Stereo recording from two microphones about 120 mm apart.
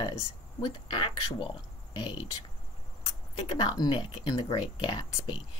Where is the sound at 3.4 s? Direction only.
35° left (ahead or behind).